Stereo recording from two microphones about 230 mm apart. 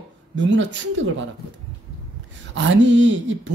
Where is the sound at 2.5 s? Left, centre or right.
Right.